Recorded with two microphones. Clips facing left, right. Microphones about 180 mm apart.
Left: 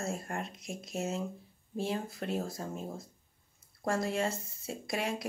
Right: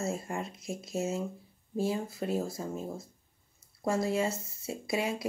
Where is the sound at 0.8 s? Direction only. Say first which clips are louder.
Right 3 dB; 15° left (ahead or behind).